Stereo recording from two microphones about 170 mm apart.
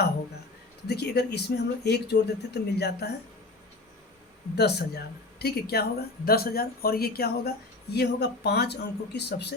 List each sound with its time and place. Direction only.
0.9 s speech: 75° left (ahead or behind)
4.5 s speech: 70° left (ahead or behind)